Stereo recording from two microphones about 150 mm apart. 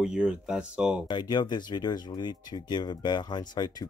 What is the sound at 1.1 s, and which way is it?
Speech, 30° left (ahead or behind).